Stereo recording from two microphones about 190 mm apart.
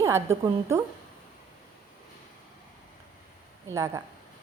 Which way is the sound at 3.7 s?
15° right (ahead or behind).